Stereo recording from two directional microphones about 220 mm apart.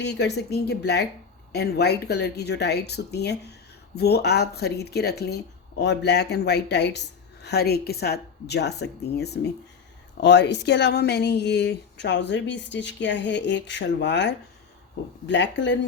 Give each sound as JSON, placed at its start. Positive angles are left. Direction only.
{"t": 0.0, "sound": "speech", "side_deg": 50}